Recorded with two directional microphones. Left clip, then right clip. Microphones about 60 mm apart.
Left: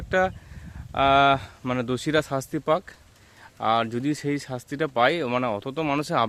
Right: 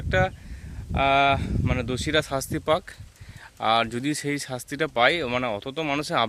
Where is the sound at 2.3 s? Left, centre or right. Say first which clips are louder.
Even; centre.